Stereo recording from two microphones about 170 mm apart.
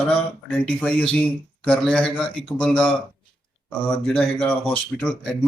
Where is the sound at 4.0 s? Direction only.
5° left (ahead or behind).